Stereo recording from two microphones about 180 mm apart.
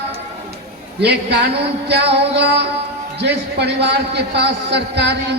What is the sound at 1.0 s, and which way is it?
A woman's voice, 65° right (ahead or behind).